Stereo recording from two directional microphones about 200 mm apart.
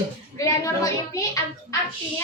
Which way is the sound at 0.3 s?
15° left (ahead or behind).